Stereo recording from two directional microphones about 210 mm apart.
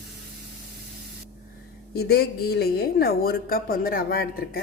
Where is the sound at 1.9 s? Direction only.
50° left (ahead or behind).